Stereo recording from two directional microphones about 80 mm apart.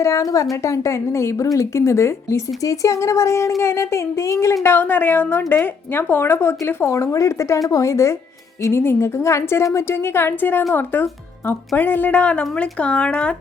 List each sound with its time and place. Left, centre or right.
0.0 s a woman's voice: left
6.9 s a woman's voice: left; by 13.3 s centre